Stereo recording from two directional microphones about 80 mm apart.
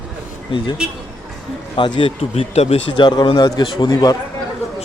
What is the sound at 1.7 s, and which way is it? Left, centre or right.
A man's voice, left.